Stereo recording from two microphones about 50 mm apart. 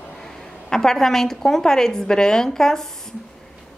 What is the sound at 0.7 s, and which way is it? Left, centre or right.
A woman's voice, centre.